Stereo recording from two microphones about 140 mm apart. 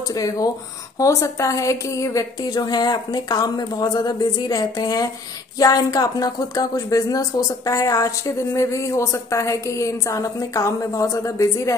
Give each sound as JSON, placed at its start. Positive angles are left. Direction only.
{"t": 0.1, "sound": "a woman's voice", "side_deg": 25}